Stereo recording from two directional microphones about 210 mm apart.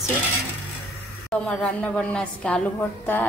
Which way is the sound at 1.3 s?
5° left (ahead or behind).